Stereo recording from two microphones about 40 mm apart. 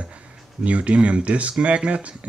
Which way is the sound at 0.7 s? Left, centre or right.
Right.